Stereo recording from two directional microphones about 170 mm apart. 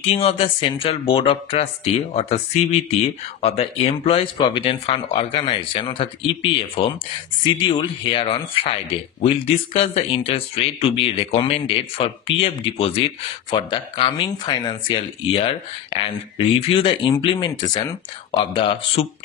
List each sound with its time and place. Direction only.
0.0 s speech: 35° left (ahead or behind)